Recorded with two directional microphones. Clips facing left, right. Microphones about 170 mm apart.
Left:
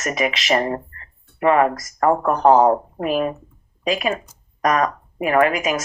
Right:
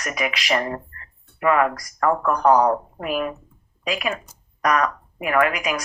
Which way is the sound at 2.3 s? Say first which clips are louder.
Left 3 dB; 25° left (ahead or behind).